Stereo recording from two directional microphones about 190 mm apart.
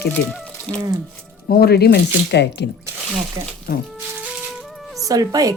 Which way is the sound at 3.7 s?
45° left (ahead or behind).